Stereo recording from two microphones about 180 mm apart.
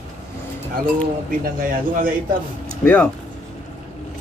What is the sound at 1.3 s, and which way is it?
A man's voice, 50° right (ahead or behind).